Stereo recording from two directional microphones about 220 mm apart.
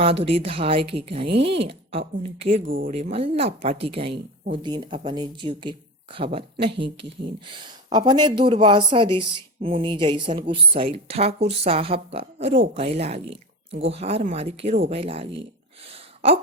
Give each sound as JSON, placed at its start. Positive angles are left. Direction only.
{"t": 0.0, "sound": "a woman's voice", "side_deg": -25}
{"t": 7.9, "sound": "a woman's voice", "side_deg": -20}